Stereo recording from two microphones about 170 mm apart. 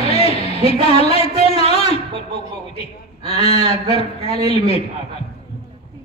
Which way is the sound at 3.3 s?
40° left (ahead or behind).